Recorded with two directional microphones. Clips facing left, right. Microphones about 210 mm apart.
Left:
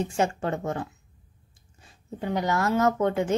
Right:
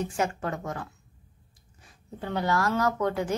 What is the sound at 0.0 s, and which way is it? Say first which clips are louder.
A woman's voice: left 3 dB; 25° left (ahead or behind).